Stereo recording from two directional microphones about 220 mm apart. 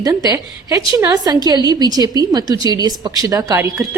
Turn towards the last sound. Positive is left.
turn(degrees=-15)  # may be behind; listen again after turning